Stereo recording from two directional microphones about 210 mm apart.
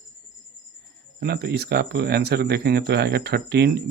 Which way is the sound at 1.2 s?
50° right (ahead or behind).